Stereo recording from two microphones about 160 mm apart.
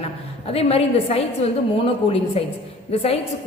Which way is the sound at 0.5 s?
40° left (ahead or behind).